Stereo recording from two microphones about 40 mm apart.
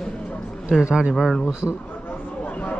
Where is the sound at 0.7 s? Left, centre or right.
Centre.